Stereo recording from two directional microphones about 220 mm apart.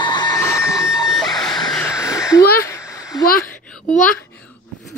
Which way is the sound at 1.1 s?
Centre (ahead or behind).